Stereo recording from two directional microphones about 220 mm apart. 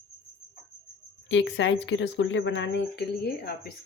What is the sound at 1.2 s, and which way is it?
A woman's voice, 55° left (ahead or behind).